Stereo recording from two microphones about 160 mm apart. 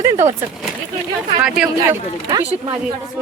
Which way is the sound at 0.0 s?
15° right (ahead or behind).